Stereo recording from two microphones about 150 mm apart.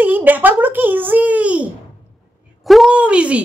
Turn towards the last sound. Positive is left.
turn(degrees=-10)  # may be behind; listen again after turning